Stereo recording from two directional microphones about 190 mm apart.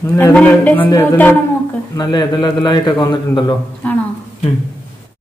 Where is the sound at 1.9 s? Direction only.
25° left (ahead or behind).